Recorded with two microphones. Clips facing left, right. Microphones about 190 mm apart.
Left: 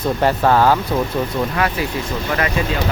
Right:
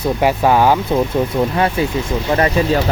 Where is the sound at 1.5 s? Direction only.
25° right (ahead or behind).